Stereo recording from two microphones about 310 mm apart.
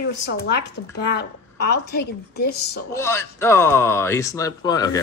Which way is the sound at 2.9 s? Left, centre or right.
Centre.